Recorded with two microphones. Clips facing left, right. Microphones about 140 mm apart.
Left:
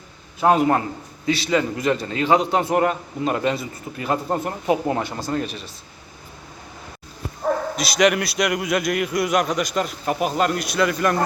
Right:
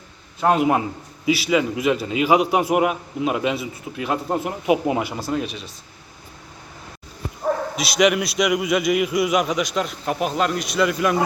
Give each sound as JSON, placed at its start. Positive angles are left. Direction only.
{"t": 0.3, "sound": "a man's voice", "side_deg": 0}
{"t": 0.7, "sound": "a man's voice", "side_deg": -10}
{"t": 7.8, "sound": "a man's voice", "side_deg": 0}